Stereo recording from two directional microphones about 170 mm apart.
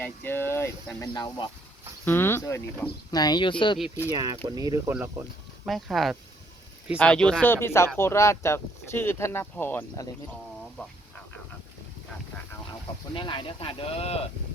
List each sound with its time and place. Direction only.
0.0 s speech: 10° left (ahead or behind)
2.0 s speech: 15° left (ahead or behind)
3.1 s speech: 25° left (ahead or behind)
3.8 s speech: 5° right (ahead or behind)
4.1 s speech: 20° right (ahead or behind)
5.6 s speech: centre (ahead or behind)
13.1 s speech: 30° left (ahead or behind)